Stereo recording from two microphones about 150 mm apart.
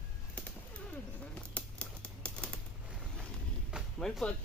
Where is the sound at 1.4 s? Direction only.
10° left (ahead or behind).